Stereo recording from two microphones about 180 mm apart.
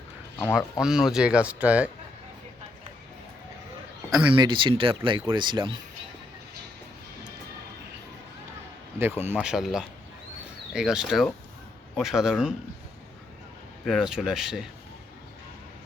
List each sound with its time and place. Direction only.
0.3 s speech: 10° left (ahead or behind)
0.8 s speech: 5° right (ahead or behind)
4.4 s speech: 25° right (ahead or behind)
9.0 s speech: 15° right (ahead or behind)
13.8 s speech: centre (ahead or behind)